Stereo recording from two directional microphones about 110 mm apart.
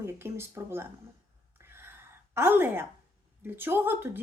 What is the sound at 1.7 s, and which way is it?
Whispering, 20° right (ahead or behind).